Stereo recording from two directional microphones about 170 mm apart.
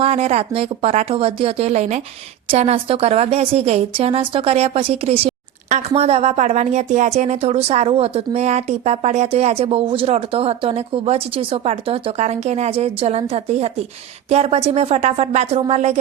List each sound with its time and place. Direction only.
0.0 s a woman's voice: 35° right (ahead or behind)